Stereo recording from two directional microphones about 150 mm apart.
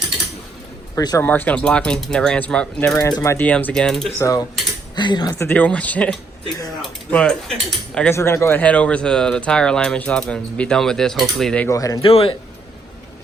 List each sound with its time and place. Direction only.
0.9 s speech: 25° left (ahead or behind)
1.2 s speech: 10° left (ahead or behind)
2.9 s speech: 25° left (ahead or behind)
3.3 s speech: 10° left (ahead or behind)
4.2 s speech: 20° left (ahead or behind)
5.5 s speech: 10° left (ahead or behind)
8.1 s speech: 15° left (ahead or behind)
11.7 s speech: 20° left (ahead or behind)
12.0 s a man's voice: 40° left (ahead or behind)